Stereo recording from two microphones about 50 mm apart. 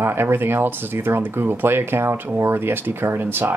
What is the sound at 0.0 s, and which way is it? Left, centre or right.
Speech, right.